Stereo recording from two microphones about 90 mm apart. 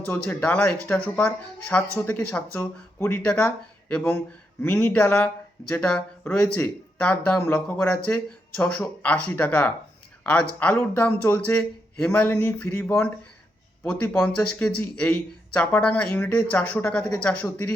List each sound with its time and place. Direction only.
0.0 s speech: 20° left (ahead or behind)